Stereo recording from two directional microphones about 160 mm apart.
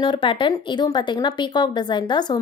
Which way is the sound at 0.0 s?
30° left (ahead or behind).